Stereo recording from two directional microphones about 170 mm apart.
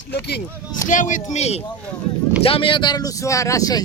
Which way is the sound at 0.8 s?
50° left (ahead or behind).